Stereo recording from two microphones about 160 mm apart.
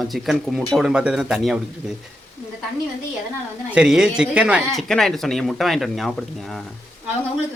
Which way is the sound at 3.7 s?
5° right (ahead or behind).